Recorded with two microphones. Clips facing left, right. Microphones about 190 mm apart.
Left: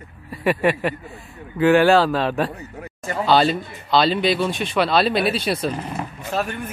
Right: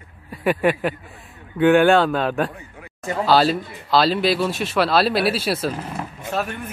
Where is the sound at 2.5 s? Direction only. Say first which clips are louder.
Left 5 dB; 40° left (ahead or behind).